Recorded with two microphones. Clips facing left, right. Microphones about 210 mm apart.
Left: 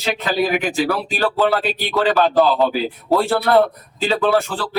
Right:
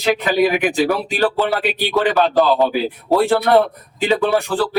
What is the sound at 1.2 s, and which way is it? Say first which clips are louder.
Speech: left 1 dB; 15° right (ahead or behind).